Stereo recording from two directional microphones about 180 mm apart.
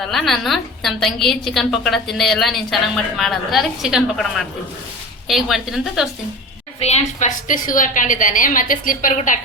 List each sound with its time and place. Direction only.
0.1 s a woman's voice: centre (ahead or behind)
6.7 s a woman's voice: 35° left (ahead or behind)